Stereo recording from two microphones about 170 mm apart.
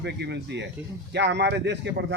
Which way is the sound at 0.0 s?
85° right.